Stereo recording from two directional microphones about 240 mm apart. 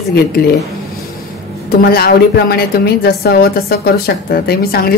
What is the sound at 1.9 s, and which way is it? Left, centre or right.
A woman's voice, left.